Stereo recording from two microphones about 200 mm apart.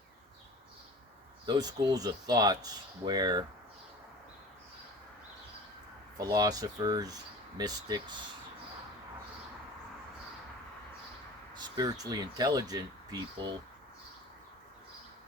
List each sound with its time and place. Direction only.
1.5 s speech: 20° right (ahead or behind)
6.1 s speech: 20° right (ahead or behind)
11.5 s speech: 20° right (ahead or behind)